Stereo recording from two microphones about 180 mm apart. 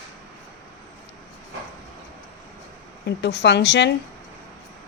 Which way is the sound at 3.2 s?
75° left (ahead or behind).